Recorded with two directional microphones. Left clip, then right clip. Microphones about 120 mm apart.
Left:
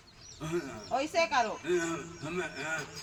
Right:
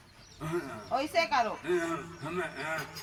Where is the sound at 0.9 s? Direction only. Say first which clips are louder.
Even; 20° right (ahead or behind).